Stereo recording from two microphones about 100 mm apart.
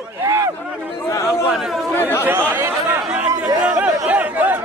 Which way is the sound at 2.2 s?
25° right (ahead or behind).